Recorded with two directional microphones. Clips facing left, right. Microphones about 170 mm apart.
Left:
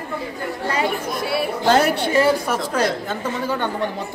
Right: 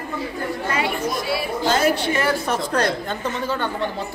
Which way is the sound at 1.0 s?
60° left (ahead or behind).